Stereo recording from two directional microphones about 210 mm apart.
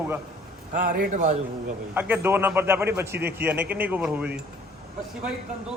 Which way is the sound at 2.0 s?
10° right (ahead or behind).